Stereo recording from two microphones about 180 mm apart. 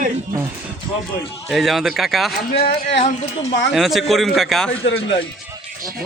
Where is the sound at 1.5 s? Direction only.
Centre (ahead or behind).